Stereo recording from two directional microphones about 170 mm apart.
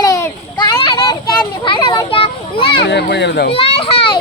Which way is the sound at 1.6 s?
30° left (ahead or behind).